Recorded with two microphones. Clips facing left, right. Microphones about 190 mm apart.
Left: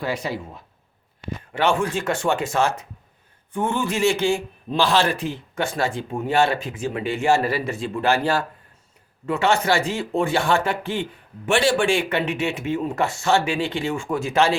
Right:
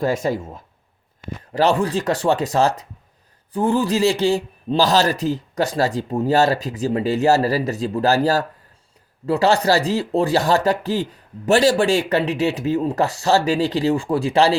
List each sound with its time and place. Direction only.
0.0 s speech: 45° right (ahead or behind)
1.5 s speech: 35° right (ahead or behind)